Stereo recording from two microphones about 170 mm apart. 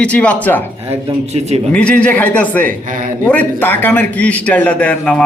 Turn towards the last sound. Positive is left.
turn(degrees=10)  # may be behind; listen again after turning